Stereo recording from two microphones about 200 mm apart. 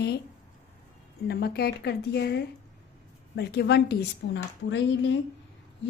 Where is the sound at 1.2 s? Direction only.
50° left (ahead or behind).